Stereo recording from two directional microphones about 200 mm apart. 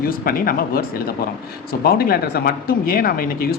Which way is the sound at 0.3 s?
45° left (ahead or behind).